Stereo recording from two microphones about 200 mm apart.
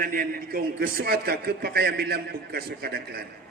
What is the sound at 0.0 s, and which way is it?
A man's voice, 45° right (ahead or behind).